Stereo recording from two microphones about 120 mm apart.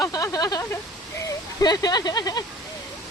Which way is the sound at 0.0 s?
30° left (ahead or behind).